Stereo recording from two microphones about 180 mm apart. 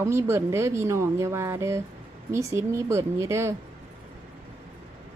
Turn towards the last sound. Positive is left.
turn(degrees=-15)  # may be behind; listen again after turning